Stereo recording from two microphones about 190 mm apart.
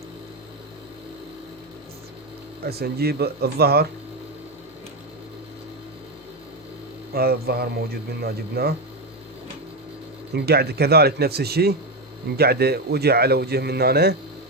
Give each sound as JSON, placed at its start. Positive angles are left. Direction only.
{"t": 2.6, "sound": "a man's voice", "side_deg": -55}
{"t": 7.1, "sound": "a man's voice", "side_deg": -55}
{"t": 10.3, "sound": "a man's voice", "side_deg": -55}